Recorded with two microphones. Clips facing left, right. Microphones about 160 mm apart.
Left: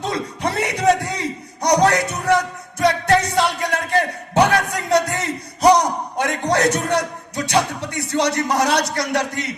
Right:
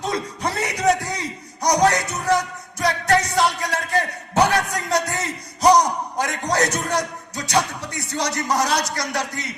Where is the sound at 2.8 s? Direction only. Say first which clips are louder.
Left 3 dB; 25° left (ahead or behind).